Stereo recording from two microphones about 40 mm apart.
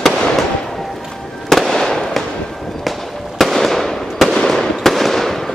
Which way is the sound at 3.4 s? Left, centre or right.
Centre.